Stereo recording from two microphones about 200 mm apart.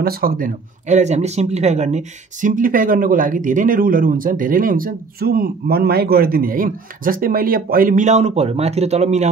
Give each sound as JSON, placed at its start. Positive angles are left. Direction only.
{"t": 0.0, "sound": "speech", "side_deg": -50}